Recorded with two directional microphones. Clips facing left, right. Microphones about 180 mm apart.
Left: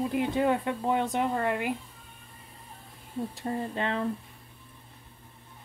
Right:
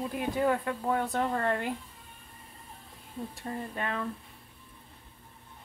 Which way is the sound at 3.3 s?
25° left (ahead or behind).